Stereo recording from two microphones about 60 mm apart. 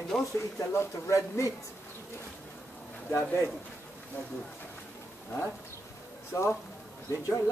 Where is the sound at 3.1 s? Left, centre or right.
Left.